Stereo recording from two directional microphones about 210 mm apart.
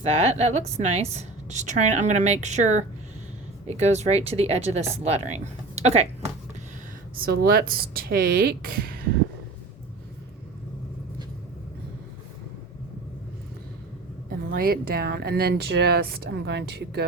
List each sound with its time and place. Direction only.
0.0 s a woman's voice: 30° right (ahead or behind)
7.2 s speech: 45° right (ahead or behind)
14.3 s speech: 45° right (ahead or behind)